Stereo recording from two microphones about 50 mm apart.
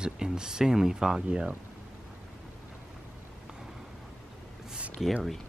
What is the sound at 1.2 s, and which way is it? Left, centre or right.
Speech, right.